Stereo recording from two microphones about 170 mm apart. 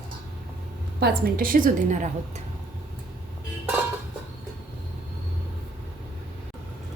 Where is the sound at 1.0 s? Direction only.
60° right (ahead or behind).